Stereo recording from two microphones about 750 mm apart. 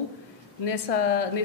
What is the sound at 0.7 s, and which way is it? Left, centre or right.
Speech, left.